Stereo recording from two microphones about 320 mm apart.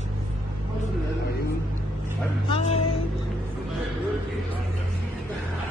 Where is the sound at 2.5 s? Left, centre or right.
Centre.